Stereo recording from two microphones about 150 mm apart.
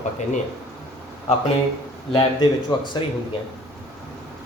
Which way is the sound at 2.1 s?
30° left (ahead or behind).